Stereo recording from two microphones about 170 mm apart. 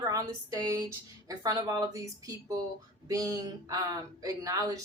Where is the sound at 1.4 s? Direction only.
25° right (ahead or behind).